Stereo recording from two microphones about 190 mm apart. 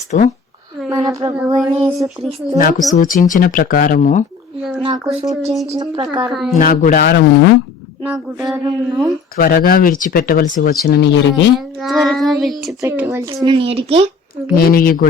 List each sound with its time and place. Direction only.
0.1 s a woman's voice: 40° left (ahead or behind)
0.9 s a sound: 15° right (ahead or behind)
1.5 s child singing: centre (ahead or behind)
2.9 s speech: 45° left (ahead or behind)
4.8 s speech: 20° right (ahead or behind)
5.3 s speech: 35° right (ahead or behind)
5.7 s speech: 20° right (ahead or behind)
6.2 s child singing: centre (ahead or behind)
6.6 s speech: 45° left (ahead or behind)
8.0 s a sound: 10° right (ahead or behind)
9.3 s speech: 50° left (ahead or behind); by 11.5 s 65° left (ahead or behind)
11.5 s child singing: centre (ahead or behind)
12.8 s speech: 10° right (ahead or behind); by 14.0 s 30° right (ahead or behind)
14.5 s speech: 50° left (ahead or behind)